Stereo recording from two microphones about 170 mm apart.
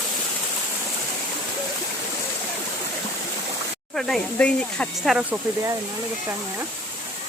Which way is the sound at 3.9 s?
5° left (ahead or behind).